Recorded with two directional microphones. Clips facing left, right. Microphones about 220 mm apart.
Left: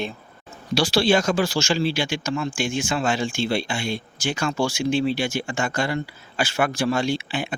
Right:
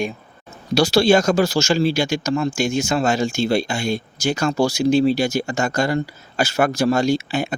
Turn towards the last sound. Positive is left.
turn(degrees=-40)  # may be behind; listen again after turning